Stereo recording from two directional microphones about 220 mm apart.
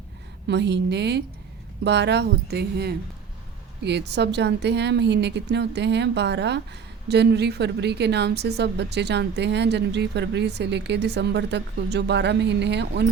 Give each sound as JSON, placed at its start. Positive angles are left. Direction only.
{"t": 0.4, "sound": "a woman's voice", "side_deg": -50}